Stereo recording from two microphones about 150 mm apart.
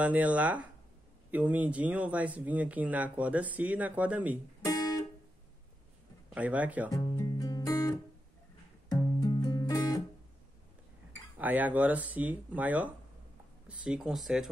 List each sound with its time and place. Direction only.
0.0 s speech: 10° right (ahead or behind)
4.6 s guitar: 25° left (ahead or behind)
6.3 s speech: 10° right (ahead or behind)
6.9 s music: 25° left (ahead or behind)
11.3 s speech: 10° right (ahead or behind)